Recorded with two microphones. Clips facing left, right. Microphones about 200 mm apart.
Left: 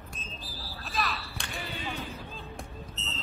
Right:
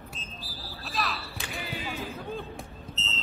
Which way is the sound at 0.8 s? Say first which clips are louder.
Even; centre (ahead or behind).